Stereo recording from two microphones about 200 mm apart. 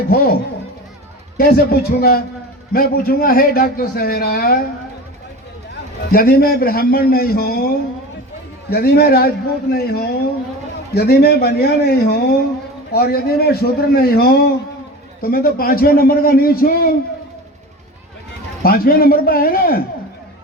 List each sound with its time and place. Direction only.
0.1 s a man's voice: 50° left (ahead or behind)
1.4 s a man's voice: 50° left (ahead or behind)
6.1 s a man's voice: 50° left (ahead or behind)
18.6 s a man's voice: 45° left (ahead or behind)